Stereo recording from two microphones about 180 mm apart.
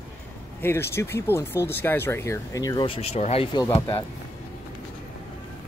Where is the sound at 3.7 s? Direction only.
15° left (ahead or behind).